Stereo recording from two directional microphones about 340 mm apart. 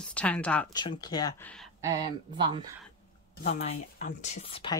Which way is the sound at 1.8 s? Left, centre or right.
Centre.